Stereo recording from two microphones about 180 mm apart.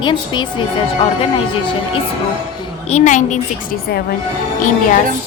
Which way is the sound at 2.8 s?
40° left (ahead or behind).